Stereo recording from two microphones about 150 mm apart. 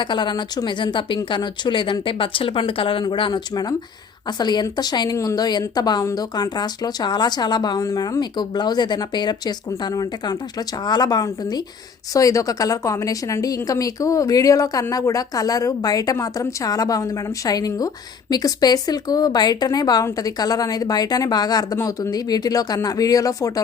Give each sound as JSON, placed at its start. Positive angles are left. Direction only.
{"t": 0.0, "sound": "a woman's voice", "side_deg": 30}